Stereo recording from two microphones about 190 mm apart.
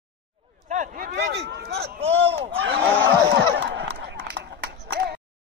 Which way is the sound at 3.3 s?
65° right (ahead or behind).